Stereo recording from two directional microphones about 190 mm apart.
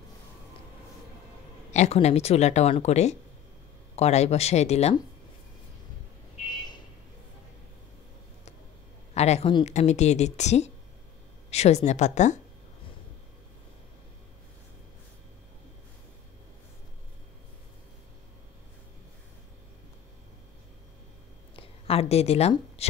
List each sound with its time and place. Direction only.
1.7 s speech: 35° left (ahead or behind)
6.5 s a sound: 20° left (ahead or behind)
9.1 s speech: 35° left (ahead or behind)
21.5 s a woman's voice: 30° left (ahead or behind)